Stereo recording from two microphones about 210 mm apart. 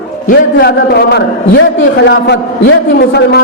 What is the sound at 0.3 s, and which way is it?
A man's voice, 50° left (ahead or behind).